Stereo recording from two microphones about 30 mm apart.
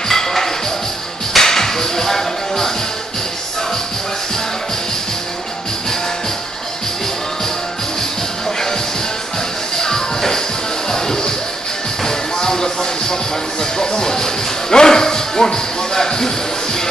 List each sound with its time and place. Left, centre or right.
0.1 s a sound: centre
1.3 s music: centre
9.8 s music: centre